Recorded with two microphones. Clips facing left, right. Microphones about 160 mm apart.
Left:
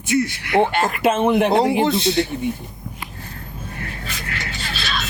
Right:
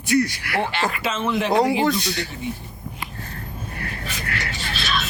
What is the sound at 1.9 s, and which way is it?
Speech, 25° left (ahead or behind).